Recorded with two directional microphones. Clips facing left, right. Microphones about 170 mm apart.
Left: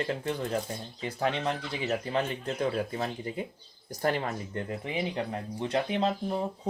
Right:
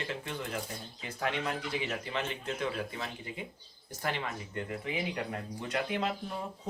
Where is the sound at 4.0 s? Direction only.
40° left (ahead or behind).